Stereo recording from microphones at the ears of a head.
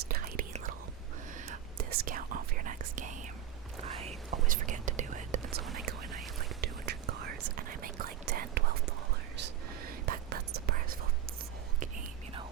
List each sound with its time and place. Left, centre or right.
0.0 s whispering: right